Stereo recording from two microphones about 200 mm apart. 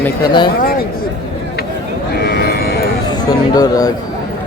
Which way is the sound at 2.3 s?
50° left (ahead or behind).